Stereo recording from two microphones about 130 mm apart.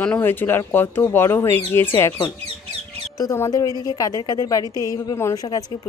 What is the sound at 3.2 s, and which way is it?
Speech, 25° left (ahead or behind).